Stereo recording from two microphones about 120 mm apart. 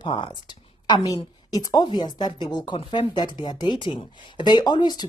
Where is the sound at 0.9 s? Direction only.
35° left (ahead or behind).